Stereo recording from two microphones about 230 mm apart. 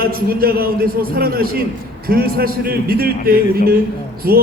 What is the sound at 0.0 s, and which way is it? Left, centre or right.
A man's voice, right.